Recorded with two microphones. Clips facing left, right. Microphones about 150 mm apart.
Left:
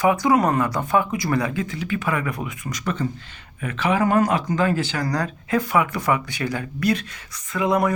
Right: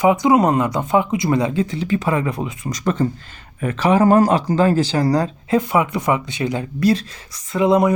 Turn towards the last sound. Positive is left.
turn(degrees=-20)  # may be behind; listen again after turning